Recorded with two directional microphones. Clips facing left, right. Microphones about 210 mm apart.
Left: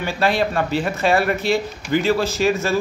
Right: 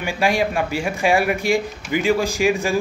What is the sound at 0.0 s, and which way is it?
Speech, 10° right (ahead or behind).